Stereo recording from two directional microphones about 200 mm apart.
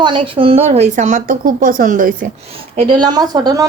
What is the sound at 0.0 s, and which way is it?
A woman's voice, 25° right (ahead or behind).